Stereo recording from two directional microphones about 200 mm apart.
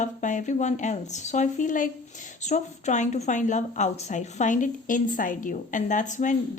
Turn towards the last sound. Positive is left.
turn(degrees=40)  # may be behind; listen again after turning